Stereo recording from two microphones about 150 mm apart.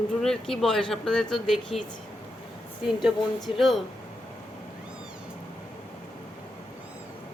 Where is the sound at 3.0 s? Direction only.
Centre (ahead or behind).